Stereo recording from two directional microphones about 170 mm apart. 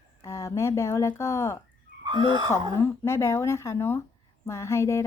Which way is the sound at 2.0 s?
25° right (ahead or behind).